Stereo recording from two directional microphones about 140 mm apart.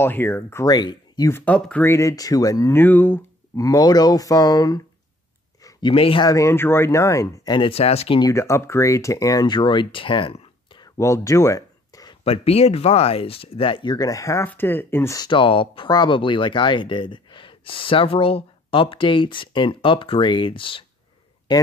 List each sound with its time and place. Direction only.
0.0 s speech: 15° left (ahead or behind)
1.3 s speech: 10° left (ahead or behind); by 6.2 s 40° left (ahead or behind)
6.2 s speech: 20° left (ahead or behind)
7.5 s speech: 40° left (ahead or behind)
8.2 s speech: 20° left (ahead or behind); by 10.9 s 35° left (ahead or behind)
11.0 s a sound: 20° left (ahead or behind)
12.3 s speech: 45° left (ahead or behind); by 15.1 s 15° left (ahead or behind)
15.1 s speech: 35° left (ahead or behind)